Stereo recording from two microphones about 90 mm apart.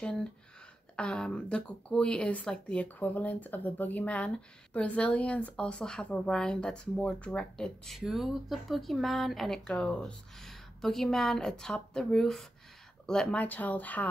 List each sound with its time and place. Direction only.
0.0 s speech: 10° left (ahead or behind)